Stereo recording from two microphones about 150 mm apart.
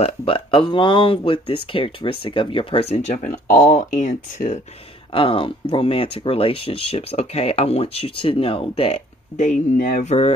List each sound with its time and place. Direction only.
0.0 s speech: 35° left (ahead or behind)
3.2 s speech: 55° left (ahead or behind)
5.1 s speech: 35° left (ahead or behind)
9.4 s speech: 55° left (ahead or behind)
10.0 s speech: 40° left (ahead or behind)